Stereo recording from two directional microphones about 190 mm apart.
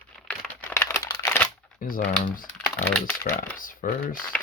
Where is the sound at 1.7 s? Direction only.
45° left (ahead or behind).